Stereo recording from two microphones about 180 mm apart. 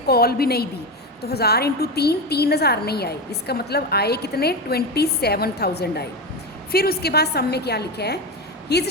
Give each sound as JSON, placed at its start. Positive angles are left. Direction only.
{"t": 0.1, "sound": "a woman's voice", "side_deg": 60}